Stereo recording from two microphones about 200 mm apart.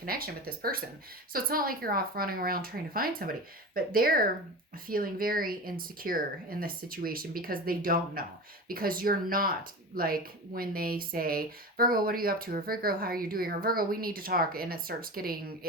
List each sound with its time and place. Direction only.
0.0 s speech: 50° right (ahead or behind)